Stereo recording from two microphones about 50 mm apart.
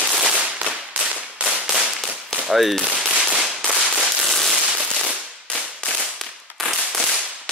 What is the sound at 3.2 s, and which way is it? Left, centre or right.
Firecracker, right.